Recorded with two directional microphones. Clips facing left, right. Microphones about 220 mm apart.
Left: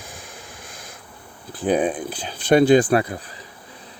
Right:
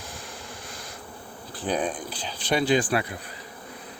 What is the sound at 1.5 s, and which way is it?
Speech, 55° left (ahead or behind).